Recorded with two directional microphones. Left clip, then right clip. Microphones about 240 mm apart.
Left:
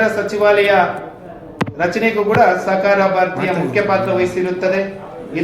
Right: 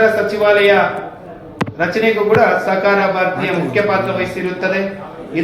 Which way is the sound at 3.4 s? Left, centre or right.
Centre.